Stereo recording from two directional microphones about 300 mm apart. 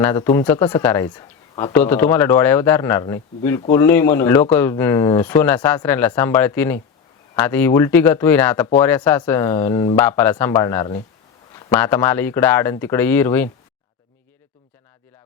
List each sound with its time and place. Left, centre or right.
0.0 s speech: centre